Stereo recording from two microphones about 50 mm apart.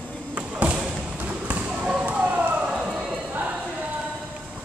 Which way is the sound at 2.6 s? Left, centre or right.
Centre.